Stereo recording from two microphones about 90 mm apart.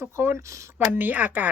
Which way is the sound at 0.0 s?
25° right (ahead or behind).